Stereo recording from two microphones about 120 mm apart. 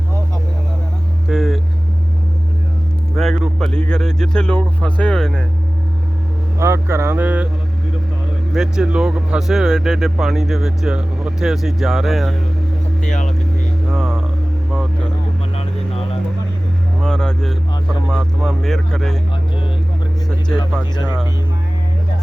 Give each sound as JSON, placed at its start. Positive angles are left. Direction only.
{"t": 1.3, "sound": "vehicle", "side_deg": 0}
{"t": 3.2, "sound": "speech", "side_deg": 0}
{"t": 6.6, "sound": "speech", "side_deg": -20}
{"t": 8.5, "sound": "speech", "side_deg": -5}
{"t": 13.0, "sound": "speech", "side_deg": 90}
{"t": 13.8, "sound": "a sound", "side_deg": 0}
{"t": 15.5, "sound": "vehicle", "side_deg": 55}
{"t": 17.0, "sound": "speech", "side_deg": 5}